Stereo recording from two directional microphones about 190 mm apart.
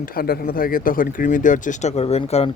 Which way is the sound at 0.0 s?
50° left (ahead or behind).